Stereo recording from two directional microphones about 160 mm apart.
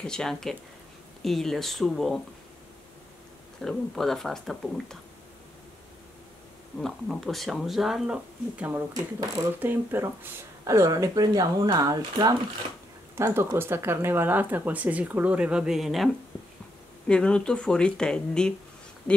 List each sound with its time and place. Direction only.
0.0 s speech: 5° left (ahead or behind)
3.6 s speech: centre (ahead or behind)
6.8 s speech: centre (ahead or behind)
17.1 s speech: 5° left (ahead or behind)